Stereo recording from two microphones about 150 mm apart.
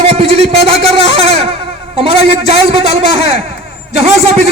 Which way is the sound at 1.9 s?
40° right (ahead or behind).